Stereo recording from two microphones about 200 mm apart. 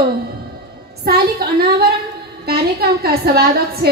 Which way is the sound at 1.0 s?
50° right (ahead or behind).